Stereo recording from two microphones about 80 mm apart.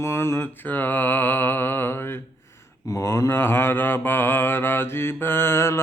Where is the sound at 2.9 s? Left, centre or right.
Left.